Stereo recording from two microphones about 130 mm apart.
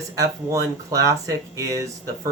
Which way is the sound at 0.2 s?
25° right (ahead or behind).